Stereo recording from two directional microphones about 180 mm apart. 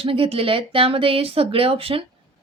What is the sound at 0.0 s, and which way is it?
A woman's voice, 30° right (ahead or behind).